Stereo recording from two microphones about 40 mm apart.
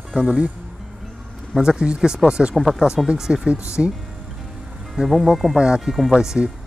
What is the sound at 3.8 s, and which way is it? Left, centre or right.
Speech, centre.